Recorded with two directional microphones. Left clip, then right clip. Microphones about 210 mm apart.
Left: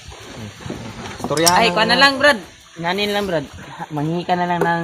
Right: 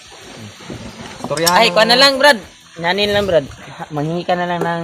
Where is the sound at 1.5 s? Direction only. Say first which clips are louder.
Right 5 dB; 55° right (ahead or behind).